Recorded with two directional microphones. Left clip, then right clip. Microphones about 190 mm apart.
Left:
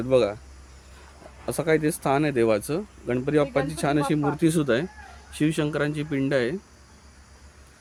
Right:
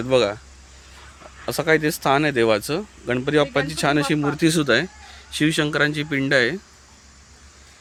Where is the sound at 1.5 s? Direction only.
Centre (ahead or behind).